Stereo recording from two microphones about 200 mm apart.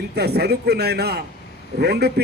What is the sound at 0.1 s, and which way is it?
A man's voice, 55° right (ahead or behind).